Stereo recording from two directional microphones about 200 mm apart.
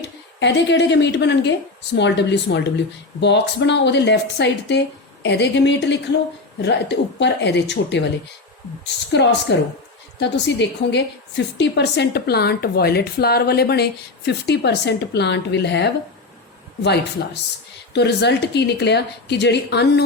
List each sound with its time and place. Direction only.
0.0 s a woman's voice: 60° left (ahead or behind)